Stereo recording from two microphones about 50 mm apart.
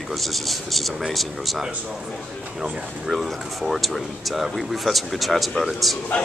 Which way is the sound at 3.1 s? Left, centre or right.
Centre.